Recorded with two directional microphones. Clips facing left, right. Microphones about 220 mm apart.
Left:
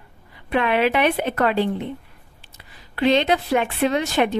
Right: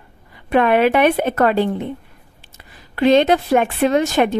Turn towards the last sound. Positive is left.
turn(degrees=-45)  # may be behind; listen again after turning